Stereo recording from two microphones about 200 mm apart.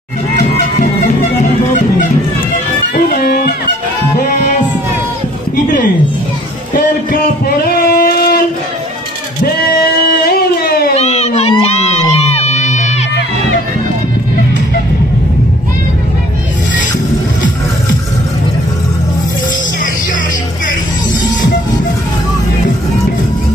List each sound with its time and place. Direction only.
0.4 s bagpipes: 40° left (ahead or behind)
3.1 s music: 50° left (ahead or behind)
6.7 s a sound: 45° left (ahead or behind)
10.2 s music: 50° left (ahead or behind)
11.0 s crowd: 30° left (ahead or behind)